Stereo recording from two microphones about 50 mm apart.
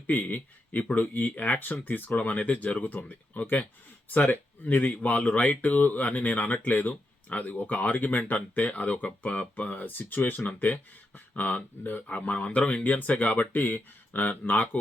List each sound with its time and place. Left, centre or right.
0.1 s speech: left
12.0 s speech: left